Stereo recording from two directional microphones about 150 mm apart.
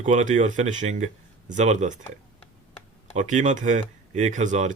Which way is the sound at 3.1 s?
55° right (ahead or behind).